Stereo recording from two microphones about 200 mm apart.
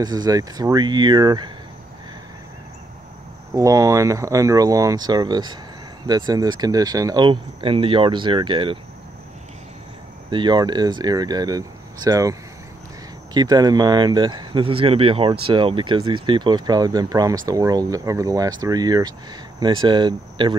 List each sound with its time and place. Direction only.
0.0 s speech: 20° right (ahead or behind)
3.5 s speech: 15° right (ahead or behind)
10.3 s speech: 20° right (ahead or behind)